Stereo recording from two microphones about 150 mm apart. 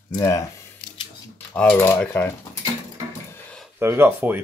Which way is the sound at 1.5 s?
10° left (ahead or behind).